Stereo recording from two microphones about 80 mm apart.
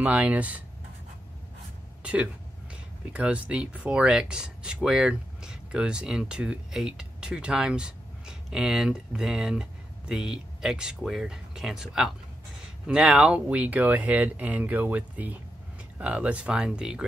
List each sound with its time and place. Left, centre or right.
0.0 s speech: centre
2.7 s speech: centre